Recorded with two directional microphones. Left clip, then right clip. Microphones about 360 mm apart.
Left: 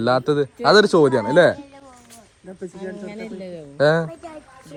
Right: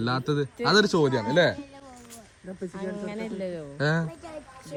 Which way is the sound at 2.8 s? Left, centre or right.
Centre.